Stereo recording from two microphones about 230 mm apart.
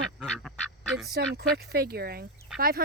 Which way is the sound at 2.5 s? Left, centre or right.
Centre.